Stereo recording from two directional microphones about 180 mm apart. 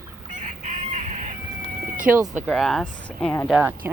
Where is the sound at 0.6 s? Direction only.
40° right (ahead or behind).